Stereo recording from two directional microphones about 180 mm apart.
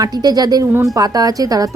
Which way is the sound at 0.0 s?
20° right (ahead or behind).